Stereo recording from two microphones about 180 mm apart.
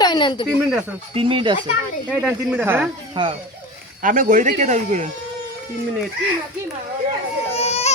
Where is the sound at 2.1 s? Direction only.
5° right (ahead or behind).